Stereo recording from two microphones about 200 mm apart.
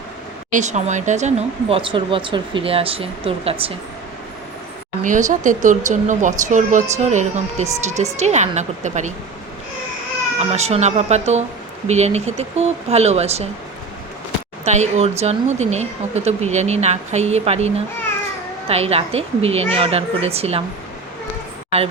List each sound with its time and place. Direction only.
0.5 s speech: 35° right (ahead or behind)
5.0 s speech: 40° right (ahead or behind)
10.3 s speech: 35° right (ahead or behind)
14.6 s speech: 35° right (ahead or behind)
18.7 s speech: 30° right (ahead or behind)